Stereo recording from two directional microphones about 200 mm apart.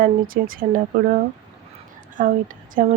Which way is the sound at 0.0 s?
45° right (ahead or behind).